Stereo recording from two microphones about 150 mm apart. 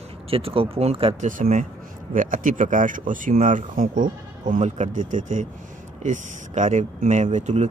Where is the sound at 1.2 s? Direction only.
60° right (ahead or behind).